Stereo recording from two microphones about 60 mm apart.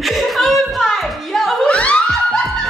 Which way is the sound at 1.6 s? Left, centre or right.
Left.